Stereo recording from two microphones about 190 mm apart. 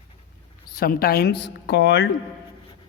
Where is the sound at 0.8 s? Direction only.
55° left (ahead or behind).